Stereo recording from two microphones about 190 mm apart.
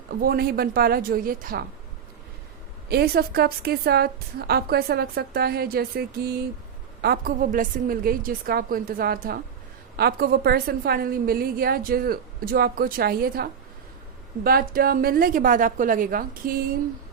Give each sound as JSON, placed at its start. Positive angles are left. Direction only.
{"t": 0.2, "sound": "a woman's voice", "side_deg": -55}
{"t": 2.9, "sound": "a woman's voice", "side_deg": -55}